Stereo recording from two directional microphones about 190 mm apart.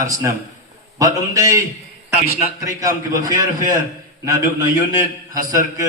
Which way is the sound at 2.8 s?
15° right (ahead or behind).